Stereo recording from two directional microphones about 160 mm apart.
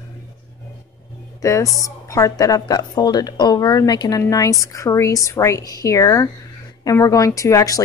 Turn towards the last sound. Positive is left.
turn(degrees=20)  # may be behind; listen again after turning